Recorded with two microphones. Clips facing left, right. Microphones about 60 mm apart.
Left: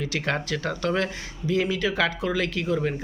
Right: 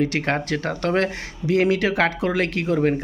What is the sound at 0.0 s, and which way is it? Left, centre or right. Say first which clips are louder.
Speech: right 5 dB; right.